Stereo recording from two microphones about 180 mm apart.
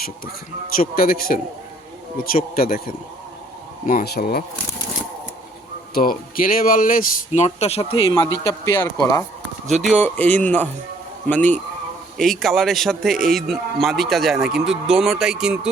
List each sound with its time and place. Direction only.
0.8 s speech: 55° left (ahead or behind)
5.9 s speech: 50° left (ahead or behind)
7.4 s speech: 35° left (ahead or behind)
8.0 s a man's voice: 20° left (ahead or behind)
9.6 s a man's voice: centre (ahead or behind)